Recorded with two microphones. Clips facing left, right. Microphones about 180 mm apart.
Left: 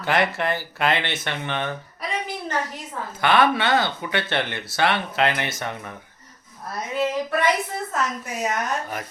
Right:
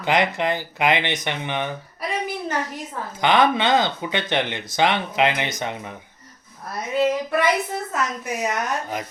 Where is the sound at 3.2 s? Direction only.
15° right (ahead or behind).